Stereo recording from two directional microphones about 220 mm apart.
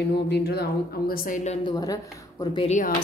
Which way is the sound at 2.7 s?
35° left (ahead or behind).